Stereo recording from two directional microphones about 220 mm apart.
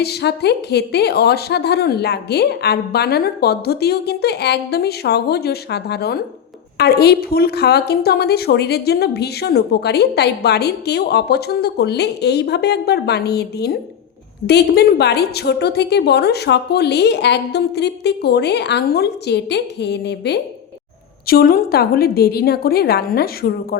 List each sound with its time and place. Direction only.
0.0 s a woman's voice: 50° left (ahead or behind)